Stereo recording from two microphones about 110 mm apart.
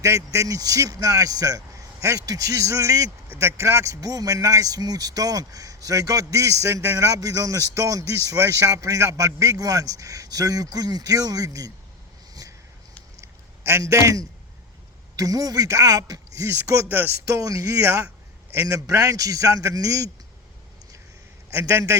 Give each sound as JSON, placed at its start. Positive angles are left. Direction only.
{"t": 0.0, "sound": "a man's voice", "side_deg": -30}
{"t": 12.3, "sound": "a sound", "side_deg": -35}
{"t": 15.1, "sound": "a man's voice", "side_deg": -30}
{"t": 16.9, "sound": "speech", "side_deg": -15}
{"t": 17.2, "sound": "a man's voice", "side_deg": -30}
{"t": 21.7, "sound": "speech", "side_deg": -25}